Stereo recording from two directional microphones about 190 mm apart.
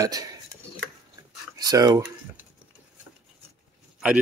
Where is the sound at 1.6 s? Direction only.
20° right (ahead or behind).